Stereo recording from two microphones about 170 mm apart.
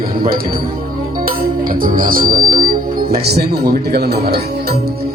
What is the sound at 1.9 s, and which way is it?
Speech, 55° right (ahead or behind).